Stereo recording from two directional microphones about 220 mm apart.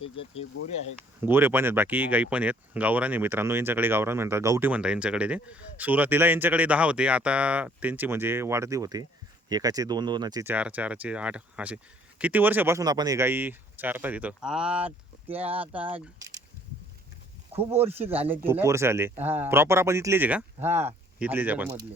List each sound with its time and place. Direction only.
1.2 s speech: 10° right (ahead or behind)
10.5 s speech: 5° right (ahead or behind)
17.7 s speech: 10° right (ahead or behind)